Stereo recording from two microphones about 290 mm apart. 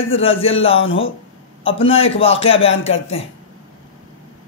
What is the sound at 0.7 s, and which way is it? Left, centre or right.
Speech, left.